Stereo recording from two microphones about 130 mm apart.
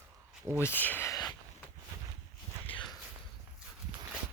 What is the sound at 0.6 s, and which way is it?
Speech, 15° left (ahead or behind).